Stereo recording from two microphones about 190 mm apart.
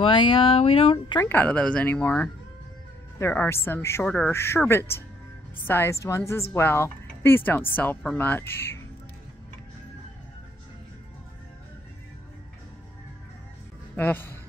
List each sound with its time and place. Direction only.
0.0 s speech: 25° left (ahead or behind)
1.2 s speech: 10° left (ahead or behind)
13.9 s a man's voice: 10° left (ahead or behind)